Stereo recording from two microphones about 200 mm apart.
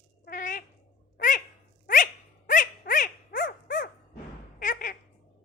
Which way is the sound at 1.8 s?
40° left (ahead or behind).